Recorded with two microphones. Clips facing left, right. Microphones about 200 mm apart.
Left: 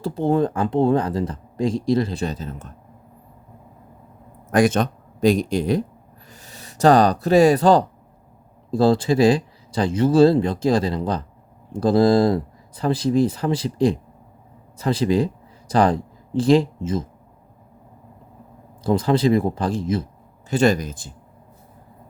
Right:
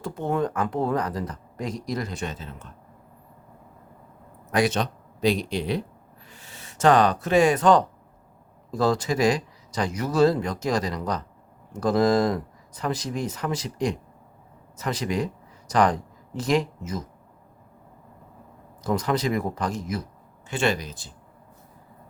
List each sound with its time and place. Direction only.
0.0 s speech: 30° left (ahead or behind)
4.5 s speech: 50° left (ahead or behind); by 17.1 s 25° left (ahead or behind)
18.8 s speech: 30° left (ahead or behind)
20.5 s speech: 40° left (ahead or behind)